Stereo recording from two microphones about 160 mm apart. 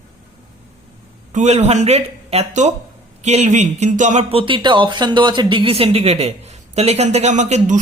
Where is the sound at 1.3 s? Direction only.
45° right (ahead or behind).